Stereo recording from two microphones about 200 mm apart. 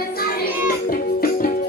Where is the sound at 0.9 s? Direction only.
45° left (ahead or behind).